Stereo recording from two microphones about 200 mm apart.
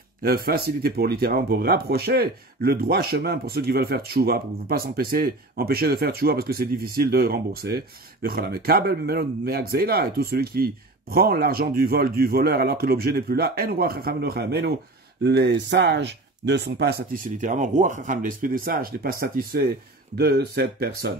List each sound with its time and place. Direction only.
0.2 s speech: 50° right (ahead or behind)